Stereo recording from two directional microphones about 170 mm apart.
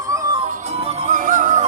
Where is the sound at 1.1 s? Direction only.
50° right (ahead or behind).